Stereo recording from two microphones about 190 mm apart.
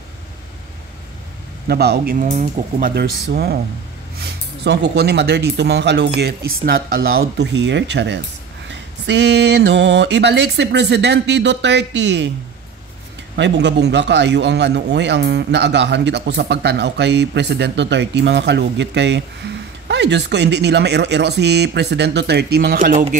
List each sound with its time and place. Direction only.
1.7 s speech: 55° right (ahead or behind); by 2.9 s 40° right (ahead or behind)
2.9 s a man's voice: 55° right (ahead or behind)
13.4 s a man's voice: 65° right (ahead or behind); by 23.0 s 45° right (ahead or behind)